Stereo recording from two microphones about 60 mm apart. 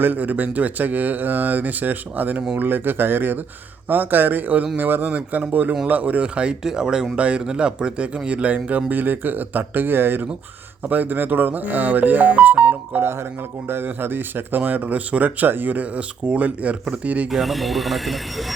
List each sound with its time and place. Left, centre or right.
0.0 s speech: right
13.0 s speech: right
17.2 s speech: centre